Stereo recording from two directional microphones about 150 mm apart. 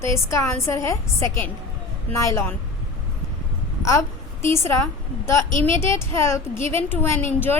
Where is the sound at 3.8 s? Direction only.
20° left (ahead or behind).